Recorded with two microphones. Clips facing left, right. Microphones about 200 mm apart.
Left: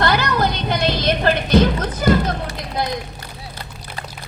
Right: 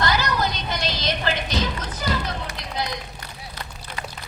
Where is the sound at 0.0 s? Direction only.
60° left (ahead or behind).